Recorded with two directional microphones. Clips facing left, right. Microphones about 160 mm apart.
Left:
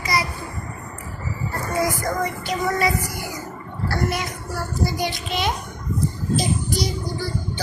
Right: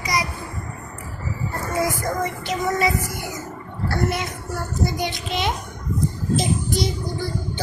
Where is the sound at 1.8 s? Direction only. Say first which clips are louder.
Even; 20° right (ahead or behind).